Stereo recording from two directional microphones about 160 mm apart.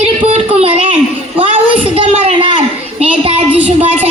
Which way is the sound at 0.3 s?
40° right (ahead or behind).